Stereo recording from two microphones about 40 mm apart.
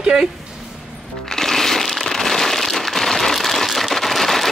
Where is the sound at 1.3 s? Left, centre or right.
Centre.